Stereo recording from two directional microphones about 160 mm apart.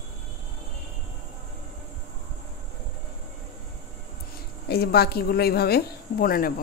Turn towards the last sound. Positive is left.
turn(degrees=65)  # may be behind; listen again after turning